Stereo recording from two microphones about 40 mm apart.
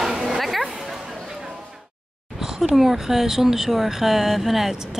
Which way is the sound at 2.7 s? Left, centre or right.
Centre.